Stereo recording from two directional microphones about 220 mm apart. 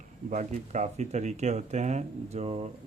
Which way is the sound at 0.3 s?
35° right (ahead or behind).